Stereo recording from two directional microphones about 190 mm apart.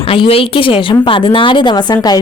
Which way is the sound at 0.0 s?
30° left (ahead or behind).